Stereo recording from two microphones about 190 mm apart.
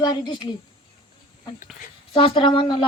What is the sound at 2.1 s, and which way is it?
Speech, 30° left (ahead or behind).